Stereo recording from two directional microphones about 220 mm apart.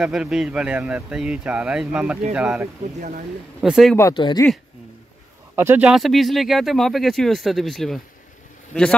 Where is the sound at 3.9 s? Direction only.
15° left (ahead or behind).